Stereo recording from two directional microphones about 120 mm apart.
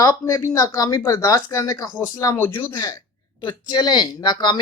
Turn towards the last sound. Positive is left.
turn(degrees=35)  # may be behind; listen again after turning